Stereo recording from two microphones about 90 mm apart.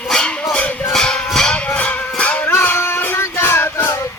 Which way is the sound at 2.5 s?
25° left (ahead or behind).